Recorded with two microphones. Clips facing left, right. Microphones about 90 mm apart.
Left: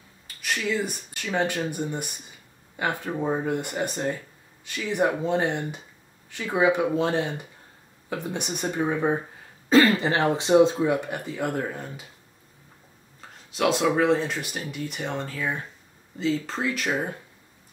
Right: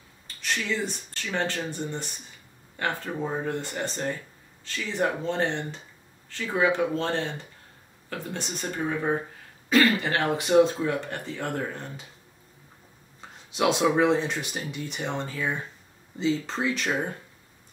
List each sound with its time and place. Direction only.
0.4 s speech: 5° left (ahead or behind)
9.7 s speech: 30° left (ahead or behind); by 12.1 s 5° left (ahead or behind)
13.6 s speech: centre (ahead or behind)